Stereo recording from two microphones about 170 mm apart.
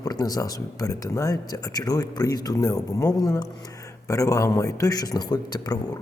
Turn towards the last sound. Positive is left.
turn(degrees=25)  # may be behind; listen again after turning